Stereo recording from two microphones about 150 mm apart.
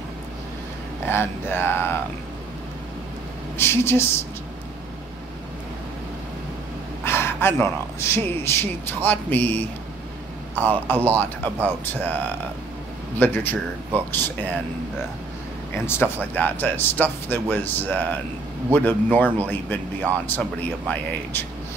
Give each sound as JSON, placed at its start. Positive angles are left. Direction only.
{"t": 1.0, "sound": "speech", "side_deg": 15}
{"t": 3.5, "sound": "speech", "side_deg": 15}
{"t": 7.1, "sound": "speech", "side_deg": 15}
{"t": 15.7, "sound": "speech", "side_deg": 15}